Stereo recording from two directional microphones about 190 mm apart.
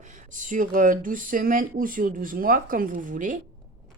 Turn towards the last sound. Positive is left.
turn(degrees=-45)  # may be behind; listen again after turning